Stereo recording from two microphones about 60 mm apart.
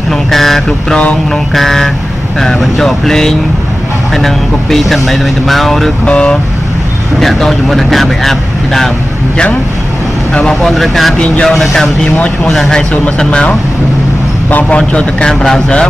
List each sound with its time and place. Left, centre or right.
0.3 s speech: centre
6.0 s a man's voice: centre
7.2 s speech: centre
10.5 s a man's voice: centre